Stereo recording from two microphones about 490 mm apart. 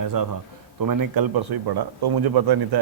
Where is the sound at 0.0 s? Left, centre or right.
Right.